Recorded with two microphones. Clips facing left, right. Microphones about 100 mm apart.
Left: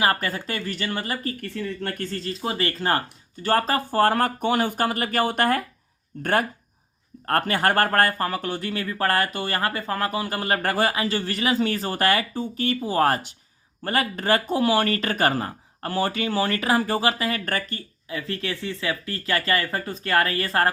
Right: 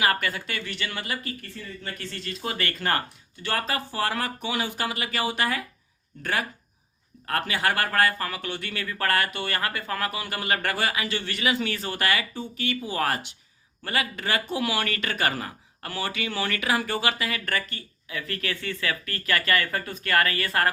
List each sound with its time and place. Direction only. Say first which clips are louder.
0.0 s speech: left 2 dB; 35° left (ahead or behind)
1.4 s speech: left 10 dB; 55° left (ahead or behind); by 3.0 s 30° left (ahead or behind)
3.4 s speech: left 7 dB; 40° left (ahead or behind)
18.2 s speech: left 2 dB; 25° left (ahead or behind)